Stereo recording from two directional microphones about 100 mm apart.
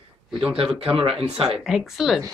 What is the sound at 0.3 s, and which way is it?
Speech, 10° right (ahead or behind).